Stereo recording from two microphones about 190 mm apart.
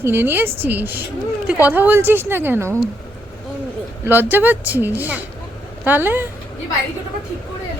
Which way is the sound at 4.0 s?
10° right (ahead or behind).